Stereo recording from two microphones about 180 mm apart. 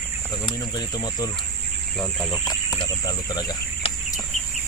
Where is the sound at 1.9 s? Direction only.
Centre (ahead or behind).